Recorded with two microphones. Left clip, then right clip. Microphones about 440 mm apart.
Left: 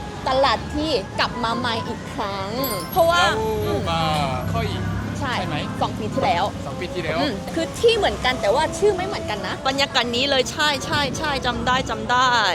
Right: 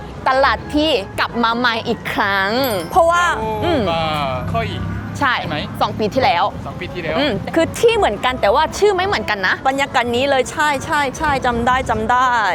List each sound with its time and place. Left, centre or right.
0.3 s a woman's voice: right
2.9 s speech: right
9.6 s a woman's voice: right